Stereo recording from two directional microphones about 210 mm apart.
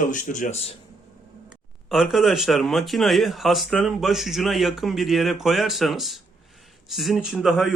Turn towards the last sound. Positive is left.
turn(degrees=0)  # may be behind; listen again after turning